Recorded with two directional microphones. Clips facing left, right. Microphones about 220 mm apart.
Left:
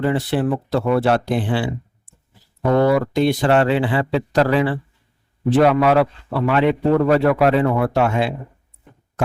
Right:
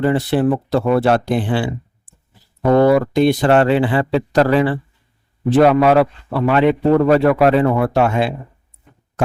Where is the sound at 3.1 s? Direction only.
50° right (ahead or behind).